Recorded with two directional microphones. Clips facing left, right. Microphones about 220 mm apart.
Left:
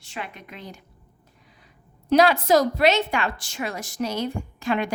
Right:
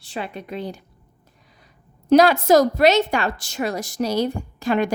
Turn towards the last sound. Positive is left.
turn(degrees=-40)  # may be behind; listen again after turning